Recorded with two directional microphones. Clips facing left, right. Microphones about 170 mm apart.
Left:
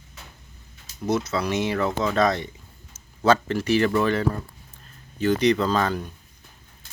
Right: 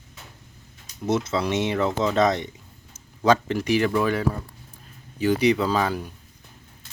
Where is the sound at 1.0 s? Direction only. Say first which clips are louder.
Right 1 dB; 25° right (ahead or behind).